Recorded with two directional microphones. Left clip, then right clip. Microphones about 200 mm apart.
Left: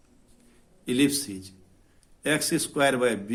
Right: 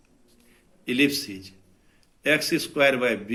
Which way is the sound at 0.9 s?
55° left (ahead or behind).